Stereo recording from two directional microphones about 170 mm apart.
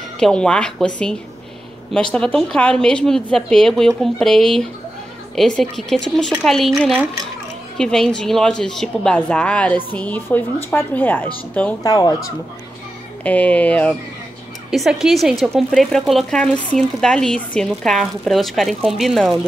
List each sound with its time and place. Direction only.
0.2 s speech: 5° left (ahead or behind)
2.1 s speech: 5° left (ahead or behind)
11.8 s speech: 20° left (ahead or behind)
13.2 s speech: 10° left (ahead or behind)